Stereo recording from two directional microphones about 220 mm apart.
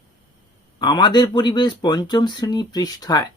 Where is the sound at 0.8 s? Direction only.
20° left (ahead or behind).